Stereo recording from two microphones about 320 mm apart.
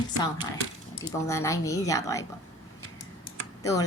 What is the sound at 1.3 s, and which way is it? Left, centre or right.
Speech, centre.